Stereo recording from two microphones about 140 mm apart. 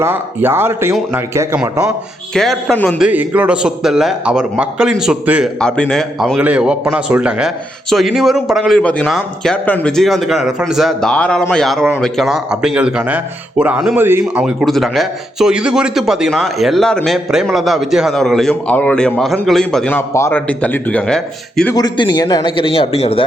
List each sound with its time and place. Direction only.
0.0 s a man's voice: 15° right (ahead or behind)
2.3 s speech: centre (ahead or behind)
3.0 s speech: 10° right (ahead or behind)
5.5 s speech: 5° left (ahead or behind)
20.0 s speech: 20° left (ahead or behind)
21.8 s a man's voice: 30° left (ahead or behind)
22.5 s speech: 40° left (ahead or behind)